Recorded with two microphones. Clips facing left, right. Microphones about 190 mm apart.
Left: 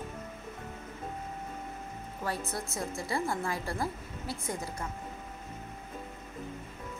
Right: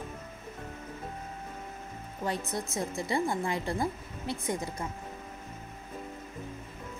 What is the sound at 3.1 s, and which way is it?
Speech, 20° right (ahead or behind).